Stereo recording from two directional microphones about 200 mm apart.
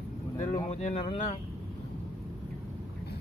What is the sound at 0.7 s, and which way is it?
Speech, 35° left (ahead or behind).